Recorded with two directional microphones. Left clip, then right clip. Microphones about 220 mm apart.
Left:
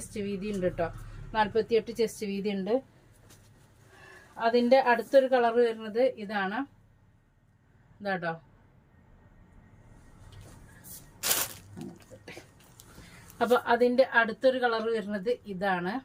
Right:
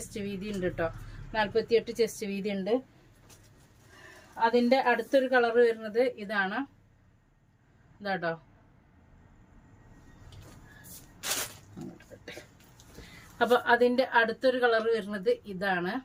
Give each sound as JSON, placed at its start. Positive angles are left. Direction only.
{"t": 0.0, "sound": "a woman's voice", "side_deg": -15}
{"t": 4.4, "sound": "a woman's voice", "side_deg": -15}
{"t": 8.0, "sound": "a woman's voice", "side_deg": -15}
{"t": 13.4, "sound": "a woman's voice", "side_deg": -15}